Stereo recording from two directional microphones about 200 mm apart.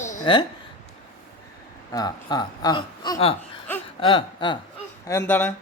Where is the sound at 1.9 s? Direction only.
20° left (ahead or behind).